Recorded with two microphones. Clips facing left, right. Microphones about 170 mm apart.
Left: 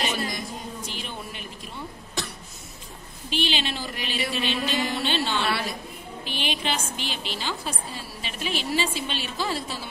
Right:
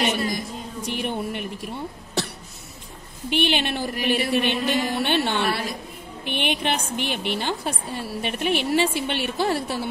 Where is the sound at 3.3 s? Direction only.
60° right (ahead or behind).